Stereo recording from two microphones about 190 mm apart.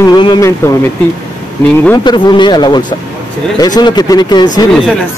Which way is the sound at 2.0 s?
25° left (ahead or behind).